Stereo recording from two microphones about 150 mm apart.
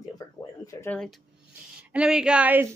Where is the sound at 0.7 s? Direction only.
20° left (ahead or behind).